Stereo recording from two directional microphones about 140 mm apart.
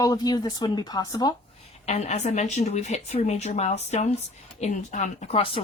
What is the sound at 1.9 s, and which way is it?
A woman's voice, 55° left (ahead or behind).